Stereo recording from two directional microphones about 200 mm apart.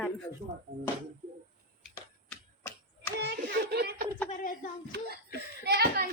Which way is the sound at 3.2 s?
55° right (ahead or behind).